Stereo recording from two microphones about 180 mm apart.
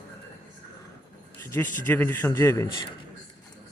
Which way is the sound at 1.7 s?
10° left (ahead or behind).